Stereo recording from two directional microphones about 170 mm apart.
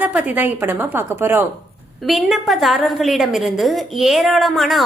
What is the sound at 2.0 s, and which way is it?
A woman's voice, centre (ahead or behind).